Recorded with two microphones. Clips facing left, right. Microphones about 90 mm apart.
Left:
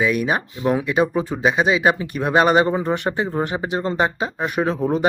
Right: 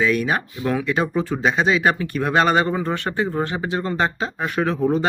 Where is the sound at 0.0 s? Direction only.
15° left (ahead or behind).